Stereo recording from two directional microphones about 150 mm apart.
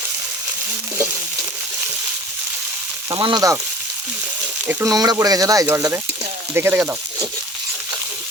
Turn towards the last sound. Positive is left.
turn(degrees=-15)  # may be behind; listen again after turning